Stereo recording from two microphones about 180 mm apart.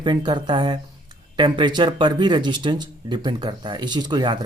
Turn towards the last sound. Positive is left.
turn(degrees=-25)  # may be behind; listen again after turning